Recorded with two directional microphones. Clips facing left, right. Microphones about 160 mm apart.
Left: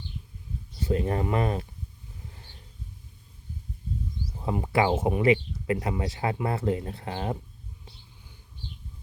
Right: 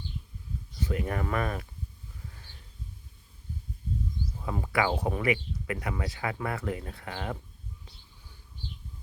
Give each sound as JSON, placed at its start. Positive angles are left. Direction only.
{"t": 0.8, "sound": "speech", "side_deg": 30}
{"t": 4.4, "sound": "speech", "side_deg": 25}